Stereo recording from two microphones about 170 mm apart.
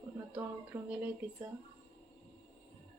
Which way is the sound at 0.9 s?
10° right (ahead or behind).